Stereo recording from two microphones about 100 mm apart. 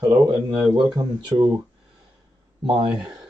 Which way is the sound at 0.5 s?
45° right (ahead or behind).